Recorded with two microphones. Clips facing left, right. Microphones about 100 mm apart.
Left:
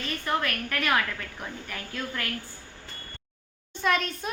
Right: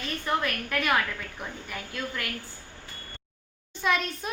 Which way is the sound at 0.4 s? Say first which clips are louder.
Right 1 dB; 5° right (ahead or behind).